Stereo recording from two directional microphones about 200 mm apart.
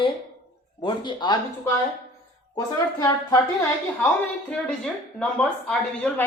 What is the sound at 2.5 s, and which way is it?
Speech, 20° left (ahead or behind).